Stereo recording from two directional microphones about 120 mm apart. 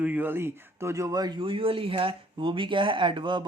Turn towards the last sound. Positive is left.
turn(degrees=-40)  # may be behind; listen again after turning